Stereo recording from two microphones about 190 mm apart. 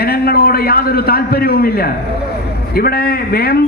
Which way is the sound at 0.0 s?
55° left (ahead or behind).